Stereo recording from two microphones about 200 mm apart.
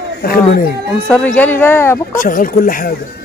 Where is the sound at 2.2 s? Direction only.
40° left (ahead or behind).